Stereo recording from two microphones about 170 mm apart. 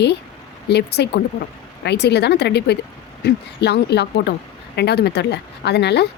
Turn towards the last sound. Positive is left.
turn(degrees=75)  # may be behind; listen again after turning